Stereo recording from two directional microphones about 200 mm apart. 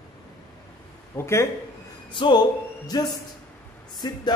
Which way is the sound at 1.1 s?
15° left (ahead or behind).